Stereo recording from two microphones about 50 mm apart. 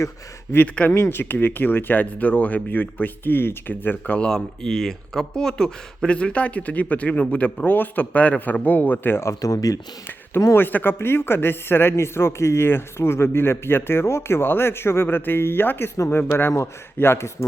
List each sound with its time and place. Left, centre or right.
0.8 s speech: left
1.1 s speech: left
4.0 s speech: left
4.3 s speech: centre; by 9.1 s left
9.1 s speech: left
10.5 s speech: left
17.0 s speech: left